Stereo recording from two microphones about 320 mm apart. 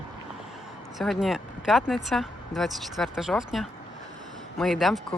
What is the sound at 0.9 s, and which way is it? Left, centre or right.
Speech, centre.